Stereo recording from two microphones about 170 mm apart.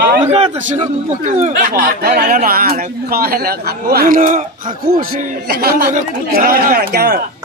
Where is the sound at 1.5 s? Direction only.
60° right (ahead or behind).